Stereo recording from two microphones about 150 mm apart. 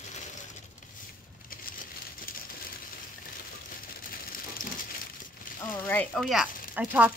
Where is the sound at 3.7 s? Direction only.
75° left (ahead or behind).